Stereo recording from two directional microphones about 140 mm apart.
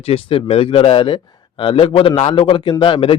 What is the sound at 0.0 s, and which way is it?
A man's voice, 45° left (ahead or behind).